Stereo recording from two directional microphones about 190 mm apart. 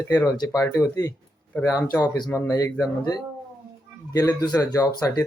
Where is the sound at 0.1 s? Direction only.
20° left (ahead or behind).